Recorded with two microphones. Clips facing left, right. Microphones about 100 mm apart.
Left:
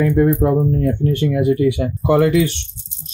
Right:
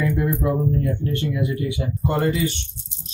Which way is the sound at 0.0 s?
50° left (ahead or behind).